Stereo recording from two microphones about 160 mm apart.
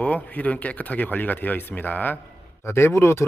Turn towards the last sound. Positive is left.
turn(degrees=15)  # may be behind; listen again after turning